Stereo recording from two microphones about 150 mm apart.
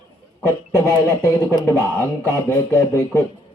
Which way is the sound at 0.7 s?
20° left (ahead or behind).